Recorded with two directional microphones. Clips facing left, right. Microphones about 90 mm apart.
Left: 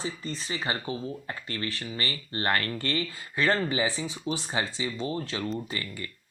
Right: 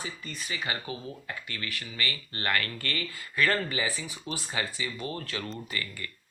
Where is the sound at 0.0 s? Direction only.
30° left (ahead or behind).